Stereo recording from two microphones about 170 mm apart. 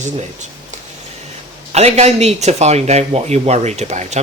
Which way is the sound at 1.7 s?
40° right (ahead or behind).